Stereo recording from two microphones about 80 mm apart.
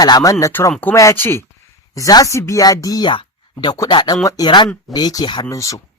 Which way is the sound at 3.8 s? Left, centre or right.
Left.